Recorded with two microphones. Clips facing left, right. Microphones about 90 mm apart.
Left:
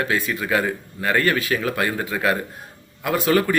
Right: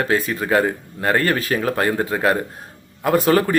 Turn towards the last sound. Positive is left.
turn(degrees=-35)  # may be behind; listen again after turning